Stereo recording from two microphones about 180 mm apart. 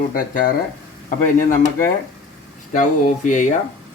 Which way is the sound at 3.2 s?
45° left (ahead or behind).